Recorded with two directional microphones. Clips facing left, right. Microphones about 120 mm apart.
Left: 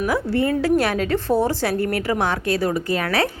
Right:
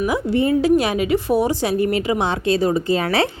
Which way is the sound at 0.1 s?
15° right (ahead or behind).